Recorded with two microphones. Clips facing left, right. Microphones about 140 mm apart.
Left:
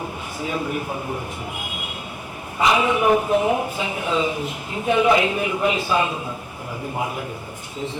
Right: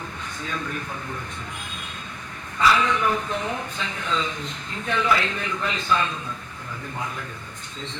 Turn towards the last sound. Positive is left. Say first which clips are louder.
# left 6 dB
turn(degrees=15)  # may be behind; listen again after turning